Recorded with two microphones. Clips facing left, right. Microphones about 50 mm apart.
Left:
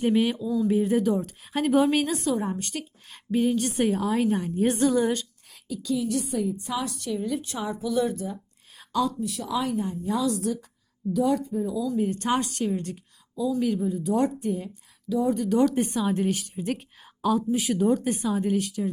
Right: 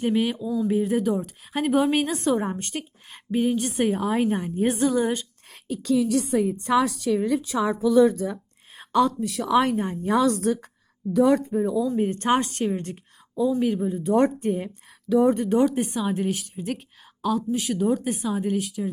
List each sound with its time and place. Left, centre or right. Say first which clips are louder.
0.0 s speech: even; centre
2.0 s a woman's voice: right 1 dB; right
2.2 s a woman's voice: right 3 dB; right
3.1 s a woman's voice: even; centre
4.7 s speech: even; centre
5.6 s a woman's voice: right 3 dB; right
5.9 s a woman's voice: right 5 dB; right
8.7 s a sound: right 5 dB; right
9.2 s a woman's voice: right 7 dB; right
11.1 s speech: right 5 dB; right
11.9 s a woman's voice: right 3 dB; right
15.5 s speech: right 1 dB; centre